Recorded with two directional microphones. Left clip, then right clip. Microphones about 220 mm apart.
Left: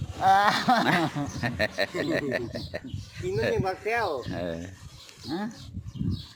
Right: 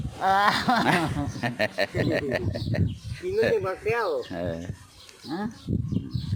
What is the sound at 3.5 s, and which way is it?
Speech, 50° left (ahead or behind).